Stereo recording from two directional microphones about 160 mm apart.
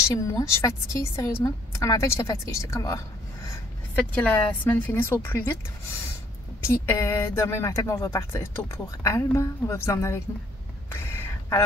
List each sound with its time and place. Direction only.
0.1 s speech: 20° left (ahead or behind)
3.4 s speech: 10° left (ahead or behind)
6.7 s speech: 15° left (ahead or behind)
10.9 s a sound: 15° left (ahead or behind)